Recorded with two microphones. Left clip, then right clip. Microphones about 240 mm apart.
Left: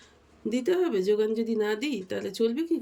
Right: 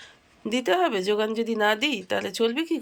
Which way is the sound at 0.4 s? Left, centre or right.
Centre.